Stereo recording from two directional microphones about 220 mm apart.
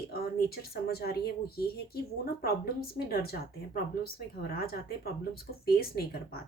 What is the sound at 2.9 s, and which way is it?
Speech, 45° left (ahead or behind).